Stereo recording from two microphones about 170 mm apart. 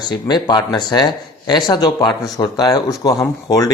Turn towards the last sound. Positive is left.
turn(degrees=20)  # may be behind; listen again after turning